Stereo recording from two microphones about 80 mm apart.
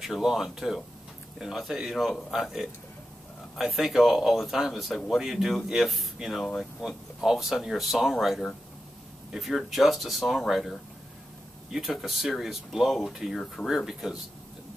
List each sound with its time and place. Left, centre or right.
0.0 s speech: centre